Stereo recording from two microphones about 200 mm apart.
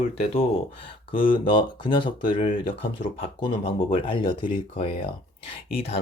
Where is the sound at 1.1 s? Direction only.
25° left (ahead or behind).